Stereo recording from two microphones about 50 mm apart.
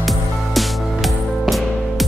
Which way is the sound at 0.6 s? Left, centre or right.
Centre.